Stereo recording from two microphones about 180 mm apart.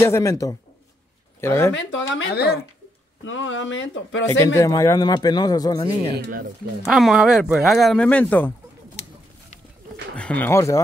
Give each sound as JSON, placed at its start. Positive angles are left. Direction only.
{"t": 0.0, "sound": "speech", "side_deg": 15}
{"t": 1.7, "sound": "speech", "side_deg": 90}
{"t": 3.3, "sound": "speech", "side_deg": 90}
{"t": 4.6, "sound": "speech", "side_deg": 20}
{"t": 6.1, "sound": "speech", "side_deg": -70}
{"t": 6.8, "sound": "speech", "side_deg": 0}
{"t": 10.1, "sound": "speech", "side_deg": 5}